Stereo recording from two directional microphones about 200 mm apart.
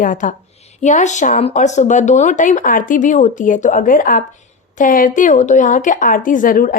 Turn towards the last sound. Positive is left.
turn(degrees=45)  # may be behind; listen again after turning